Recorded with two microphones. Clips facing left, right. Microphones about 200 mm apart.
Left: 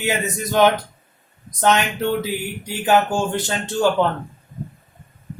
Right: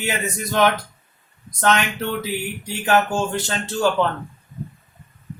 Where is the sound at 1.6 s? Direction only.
15° left (ahead or behind).